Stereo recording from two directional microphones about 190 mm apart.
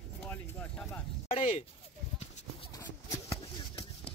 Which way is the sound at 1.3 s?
35° left (ahead or behind).